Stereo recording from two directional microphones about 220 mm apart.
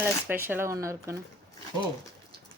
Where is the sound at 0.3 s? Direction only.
10° right (ahead or behind).